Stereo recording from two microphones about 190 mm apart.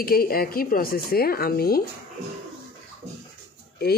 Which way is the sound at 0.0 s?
50° left (ahead or behind).